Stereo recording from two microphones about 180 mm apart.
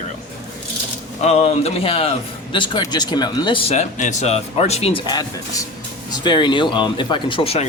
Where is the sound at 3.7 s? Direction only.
40° left (ahead or behind).